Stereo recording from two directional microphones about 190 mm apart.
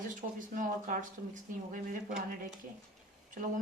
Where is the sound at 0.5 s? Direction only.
45° right (ahead or behind).